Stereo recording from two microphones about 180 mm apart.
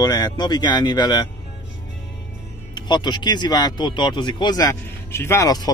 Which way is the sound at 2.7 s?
25° left (ahead or behind).